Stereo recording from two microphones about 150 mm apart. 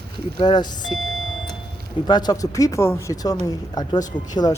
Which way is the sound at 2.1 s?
25° left (ahead or behind).